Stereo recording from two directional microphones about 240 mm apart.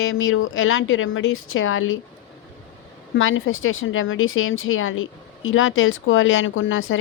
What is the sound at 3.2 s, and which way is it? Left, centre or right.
Speech, left.